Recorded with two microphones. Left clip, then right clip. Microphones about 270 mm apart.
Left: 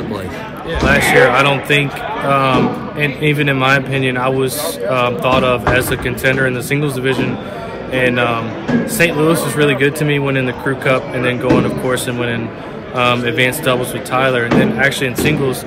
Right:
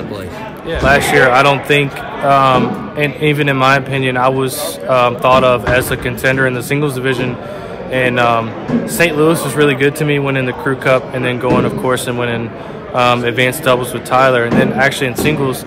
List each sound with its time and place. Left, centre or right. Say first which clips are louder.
0.7 s a man's voice: right 1 dB; centre